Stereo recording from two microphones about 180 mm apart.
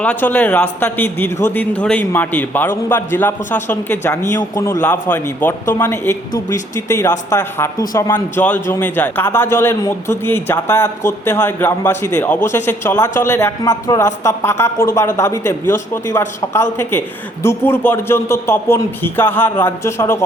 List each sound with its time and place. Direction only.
0.0 s a man's voice: 10° left (ahead or behind)